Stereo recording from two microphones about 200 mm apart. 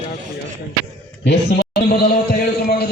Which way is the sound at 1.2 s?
55° left (ahead or behind).